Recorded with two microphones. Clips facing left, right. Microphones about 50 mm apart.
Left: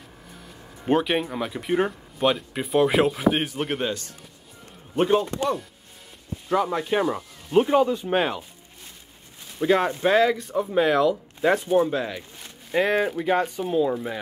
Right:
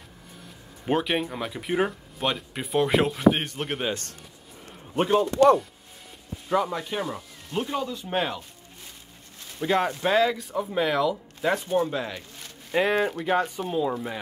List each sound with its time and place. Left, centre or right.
0.8 s speech: centre
4.9 s speech: centre
6.9 s speech: left
7.9 s speech: centre
9.6 s speech: centre